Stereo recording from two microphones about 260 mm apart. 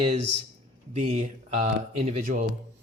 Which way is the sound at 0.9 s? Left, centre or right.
Right.